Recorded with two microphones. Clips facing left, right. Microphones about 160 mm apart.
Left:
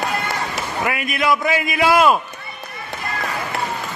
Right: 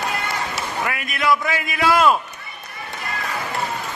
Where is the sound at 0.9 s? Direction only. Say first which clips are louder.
Left 2 dB; 15° left (ahead or behind).